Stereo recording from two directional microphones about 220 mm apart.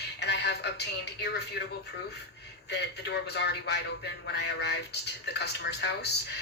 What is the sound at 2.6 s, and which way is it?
A man's voice, 50° left (ahead or behind).